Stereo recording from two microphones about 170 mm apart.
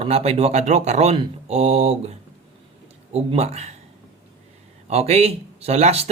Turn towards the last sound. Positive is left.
turn(degrees=-40)  # may be behind; listen again after turning